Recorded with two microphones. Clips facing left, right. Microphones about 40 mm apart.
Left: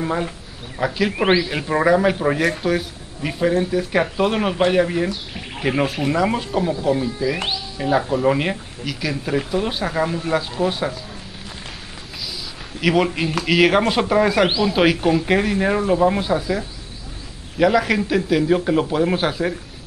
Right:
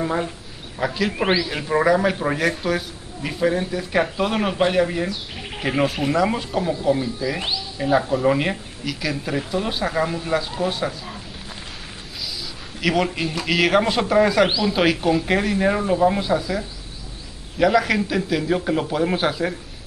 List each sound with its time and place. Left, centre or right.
0.0 s speech: centre
1.1 s speech: centre
7.7 s speech: centre
12.8 s speech: centre